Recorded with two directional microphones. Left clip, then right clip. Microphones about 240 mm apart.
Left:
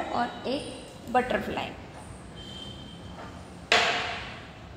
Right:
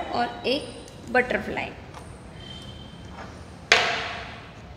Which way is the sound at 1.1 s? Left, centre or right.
Centre.